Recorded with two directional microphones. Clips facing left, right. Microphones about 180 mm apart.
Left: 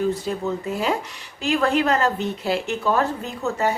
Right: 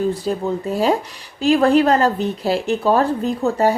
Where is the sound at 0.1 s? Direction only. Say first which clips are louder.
Right 3 dB; 35° right (ahead or behind).